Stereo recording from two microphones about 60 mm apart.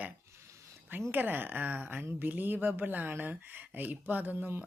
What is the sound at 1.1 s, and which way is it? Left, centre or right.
Speech, right.